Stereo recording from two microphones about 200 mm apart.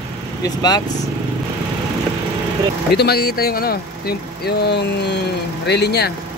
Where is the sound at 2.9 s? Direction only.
55° left (ahead or behind).